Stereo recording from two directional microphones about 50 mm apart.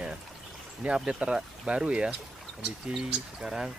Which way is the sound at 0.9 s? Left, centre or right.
Centre.